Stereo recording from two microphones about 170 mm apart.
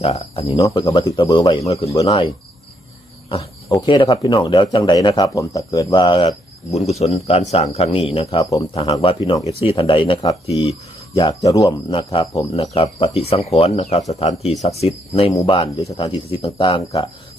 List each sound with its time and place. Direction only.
0.0 s speech: 35° left (ahead or behind)
3.8 s speech: 30° left (ahead or behind)
6.7 s speech: 40° left (ahead or behind)
8.4 s speech: 20° left (ahead or behind)
8.7 s speech: 35° left (ahead or behind)
10.2 s speech: 20° left (ahead or behind)
10.7 s cricket: 30° left (ahead or behind)
11.4 s speech: 20° left (ahead or behind)